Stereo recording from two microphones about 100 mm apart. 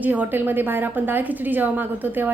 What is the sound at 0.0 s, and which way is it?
A woman's voice, 15° right (ahead or behind).